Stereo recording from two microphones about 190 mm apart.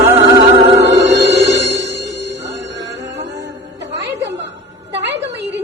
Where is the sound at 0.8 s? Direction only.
70° right (ahead or behind).